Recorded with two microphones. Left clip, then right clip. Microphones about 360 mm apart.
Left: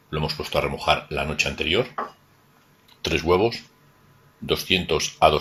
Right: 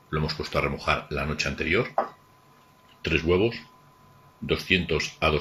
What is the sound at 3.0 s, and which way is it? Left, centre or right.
Speech, centre.